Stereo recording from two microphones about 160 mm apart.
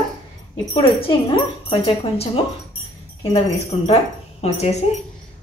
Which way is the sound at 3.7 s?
40° left (ahead or behind).